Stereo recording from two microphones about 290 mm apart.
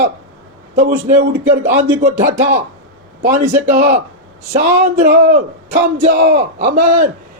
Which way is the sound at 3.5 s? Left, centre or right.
Right.